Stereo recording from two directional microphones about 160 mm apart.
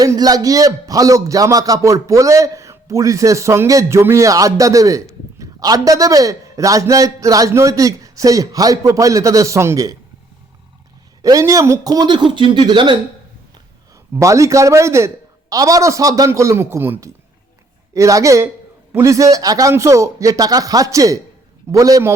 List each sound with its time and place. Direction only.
0.0 s a man's voice: 25° right (ahead or behind)
11.2 s a man's voice: 20° right (ahead or behind)
14.2 s a man's voice: 20° right (ahead or behind)